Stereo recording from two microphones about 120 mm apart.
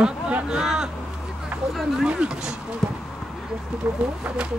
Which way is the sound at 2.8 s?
5° left (ahead or behind).